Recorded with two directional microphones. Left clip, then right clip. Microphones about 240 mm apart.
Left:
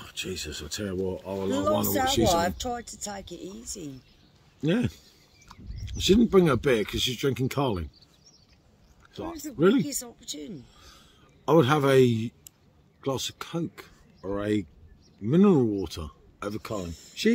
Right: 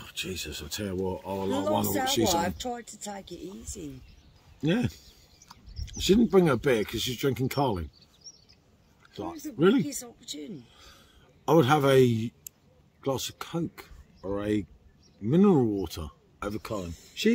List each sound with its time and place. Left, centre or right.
0.0 s speech: centre
1.5 s speech: left
2.0 s speech: centre
2.3 s speech: left
4.6 s speech: centre
5.5 s a sound: centre
6.3 s speech: centre
9.6 s speech: centre
9.8 s speech: left
10.8 s a sound: centre
13.0 s speech: centre